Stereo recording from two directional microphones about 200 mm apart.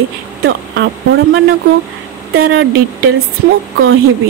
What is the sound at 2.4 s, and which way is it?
Speech, 65° right (ahead or behind).